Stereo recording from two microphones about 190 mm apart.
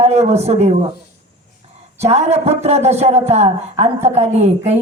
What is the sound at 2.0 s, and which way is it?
A man's voice, 35° right (ahead or behind).